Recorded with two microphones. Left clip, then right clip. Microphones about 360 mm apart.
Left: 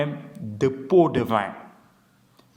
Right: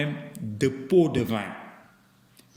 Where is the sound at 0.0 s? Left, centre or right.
Centre.